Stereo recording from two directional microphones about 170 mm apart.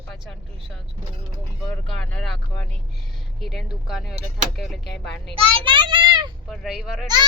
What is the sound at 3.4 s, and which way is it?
Speech, centre (ahead or behind).